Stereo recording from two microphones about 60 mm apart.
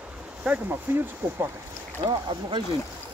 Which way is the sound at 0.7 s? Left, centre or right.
Right.